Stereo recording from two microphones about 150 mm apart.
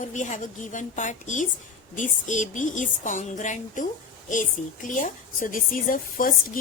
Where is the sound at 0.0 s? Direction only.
55° left (ahead or behind).